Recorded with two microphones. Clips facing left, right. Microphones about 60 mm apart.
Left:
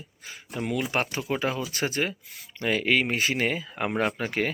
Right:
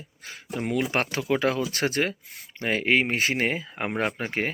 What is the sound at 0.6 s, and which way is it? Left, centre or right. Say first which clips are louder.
Speech: right 2 dB; right.